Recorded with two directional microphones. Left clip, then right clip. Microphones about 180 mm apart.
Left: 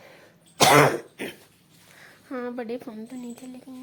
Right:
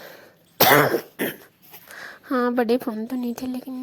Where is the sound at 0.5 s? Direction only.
65° right (ahead or behind).